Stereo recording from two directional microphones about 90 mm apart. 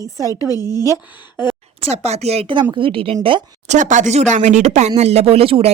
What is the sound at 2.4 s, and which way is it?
Speech, 60° right (ahead or behind).